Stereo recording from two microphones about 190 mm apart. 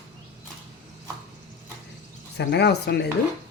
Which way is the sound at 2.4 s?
60° left (ahead or behind).